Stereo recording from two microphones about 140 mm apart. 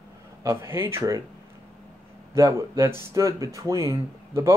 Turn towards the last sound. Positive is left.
turn(degrees=-20)  # may be behind; listen again after turning